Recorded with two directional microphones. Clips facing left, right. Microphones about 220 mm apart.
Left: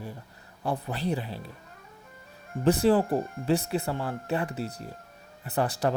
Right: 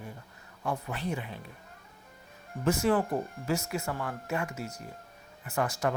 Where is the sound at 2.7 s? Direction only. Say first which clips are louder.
Left 5 dB; 35° left (ahead or behind).